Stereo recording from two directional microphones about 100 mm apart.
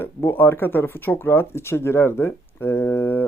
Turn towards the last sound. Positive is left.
turn(degrees=20)  # may be behind; listen again after turning